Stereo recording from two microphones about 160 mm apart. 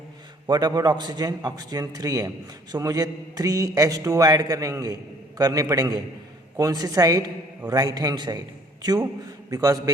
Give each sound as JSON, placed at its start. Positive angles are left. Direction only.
{"t": 0.4, "sound": "a man's voice", "side_deg": -25}